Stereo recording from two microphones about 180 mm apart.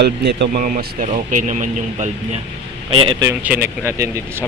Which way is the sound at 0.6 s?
50° right (ahead or behind).